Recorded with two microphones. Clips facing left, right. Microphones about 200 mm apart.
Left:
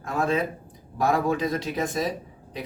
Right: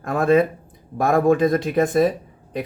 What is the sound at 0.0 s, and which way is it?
Speech, 55° right (ahead or behind).